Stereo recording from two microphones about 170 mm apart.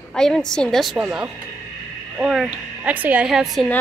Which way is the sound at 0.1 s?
5° left (ahead or behind).